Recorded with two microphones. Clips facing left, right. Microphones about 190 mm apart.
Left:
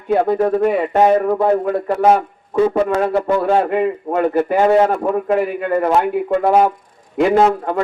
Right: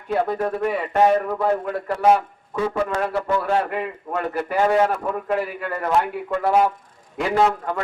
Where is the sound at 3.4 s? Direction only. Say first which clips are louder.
Left 7 dB; 30° left (ahead or behind).